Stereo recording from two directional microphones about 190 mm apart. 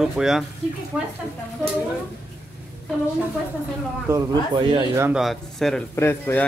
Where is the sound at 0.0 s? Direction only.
Centre (ahead or behind).